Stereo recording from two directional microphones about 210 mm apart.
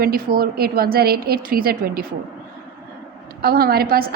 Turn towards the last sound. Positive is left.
turn(degrees=-45)  # may be behind; listen again after turning